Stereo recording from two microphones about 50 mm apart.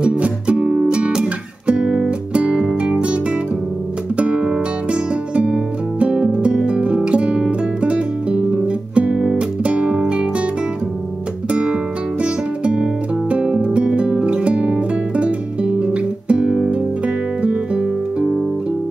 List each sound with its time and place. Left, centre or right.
0.0 s music: right
12.2 s music: right